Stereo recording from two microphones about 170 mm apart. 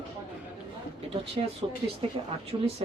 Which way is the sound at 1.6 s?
25° right (ahead or behind).